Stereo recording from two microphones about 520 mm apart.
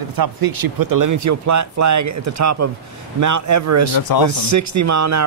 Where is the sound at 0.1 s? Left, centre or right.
Right.